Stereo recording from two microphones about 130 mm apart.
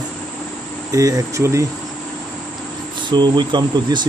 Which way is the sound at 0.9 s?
25° right (ahead or behind).